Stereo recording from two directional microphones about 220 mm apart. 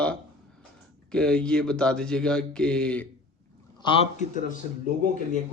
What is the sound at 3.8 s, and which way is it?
Speech, 25° left (ahead or behind).